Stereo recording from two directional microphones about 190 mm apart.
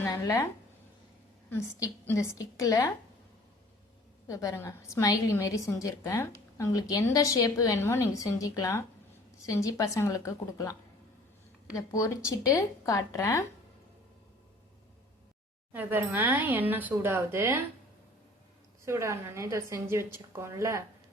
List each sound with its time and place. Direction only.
0.0 s speech: 15° left (ahead or behind)
1.5 s a woman's voice: 10° left (ahead or behind)
4.3 s a woman's voice: 15° left (ahead or behind)
11.9 s a woman's voice: 15° left (ahead or behind)
15.7 s a woman's voice: 10° right (ahead or behind)
18.9 s a woman's voice: 15° right (ahead or behind)